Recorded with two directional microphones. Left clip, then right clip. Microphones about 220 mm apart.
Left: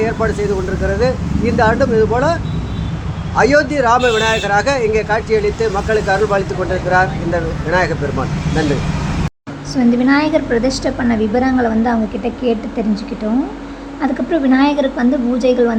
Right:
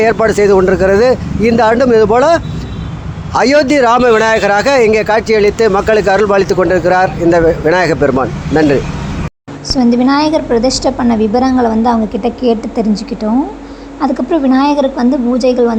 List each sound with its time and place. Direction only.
0.0 s speech: 50° right (ahead or behind)
9.7 s a woman's voice: 15° right (ahead or behind)
14.0 s a woman's voice: 10° right (ahead or behind)